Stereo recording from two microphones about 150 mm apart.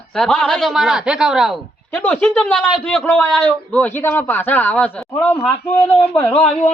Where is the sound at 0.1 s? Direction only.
5° left (ahead or behind).